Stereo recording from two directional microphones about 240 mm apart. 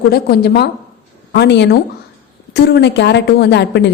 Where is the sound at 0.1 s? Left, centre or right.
Left.